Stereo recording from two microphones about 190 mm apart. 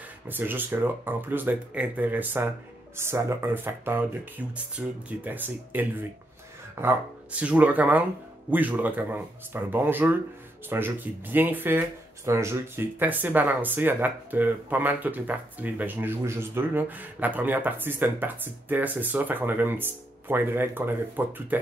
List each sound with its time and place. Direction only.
0.3 s speech: 10° right (ahead or behind)